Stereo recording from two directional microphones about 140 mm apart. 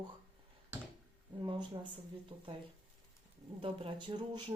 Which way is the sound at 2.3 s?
40° right (ahead or behind).